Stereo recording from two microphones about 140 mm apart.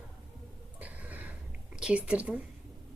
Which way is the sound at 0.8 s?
10° right (ahead or behind).